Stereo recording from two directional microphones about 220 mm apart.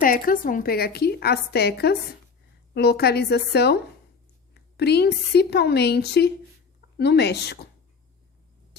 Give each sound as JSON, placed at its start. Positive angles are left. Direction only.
{"t": 0.0, "sound": "a woman's voice", "side_deg": 40}
{"t": 4.8, "sound": "a woman's voice", "side_deg": 50}